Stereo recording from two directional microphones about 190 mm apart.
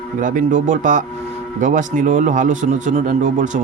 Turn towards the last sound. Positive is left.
turn(degrees=-40)  # may be behind; listen again after turning